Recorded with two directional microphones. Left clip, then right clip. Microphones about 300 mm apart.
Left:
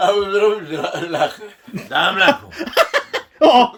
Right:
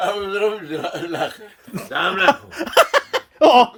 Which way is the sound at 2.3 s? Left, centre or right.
Centre.